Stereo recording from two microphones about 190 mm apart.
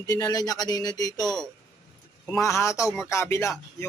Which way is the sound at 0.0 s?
20° left (ahead or behind).